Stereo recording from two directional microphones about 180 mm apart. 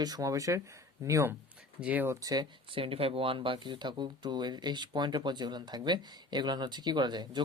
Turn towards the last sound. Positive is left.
turn(degrees=-25)  # may be behind; listen again after turning